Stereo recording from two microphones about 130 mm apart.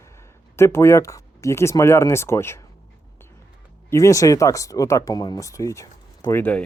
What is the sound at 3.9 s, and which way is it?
Speech, 25° left (ahead or behind).